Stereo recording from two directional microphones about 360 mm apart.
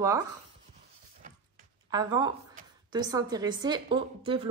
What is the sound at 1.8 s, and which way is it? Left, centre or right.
Speech, centre.